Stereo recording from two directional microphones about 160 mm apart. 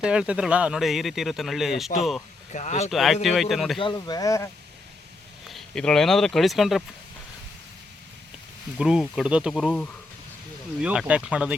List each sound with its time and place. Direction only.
0.0 s speech: 5° right (ahead or behind)
2.5 s speech: 45° left (ahead or behind)
2.9 s speech: centre (ahead or behind)
3.8 s speech: 30° left (ahead or behind)
5.5 s speech: centre (ahead or behind)
8.8 s speech: 5° right (ahead or behind)
10.8 s speech: 5° right (ahead or behind)